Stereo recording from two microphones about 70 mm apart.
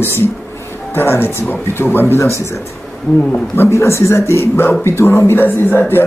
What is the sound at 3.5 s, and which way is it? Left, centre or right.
Speech, left.